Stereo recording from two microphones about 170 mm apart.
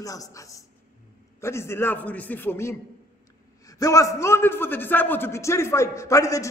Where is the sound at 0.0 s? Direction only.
20° left (ahead or behind).